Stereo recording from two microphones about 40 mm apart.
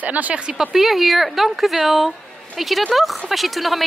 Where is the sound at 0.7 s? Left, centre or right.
Centre.